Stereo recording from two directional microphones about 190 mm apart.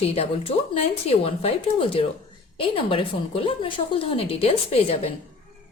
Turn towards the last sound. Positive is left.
turn(degrees=30)  # may be behind; listen again after turning